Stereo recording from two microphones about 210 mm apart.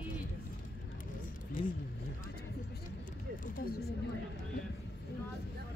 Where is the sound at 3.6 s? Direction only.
50° left (ahead or behind).